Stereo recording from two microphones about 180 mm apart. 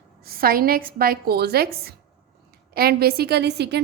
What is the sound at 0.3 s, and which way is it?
A woman's voice, 55° right (ahead or behind).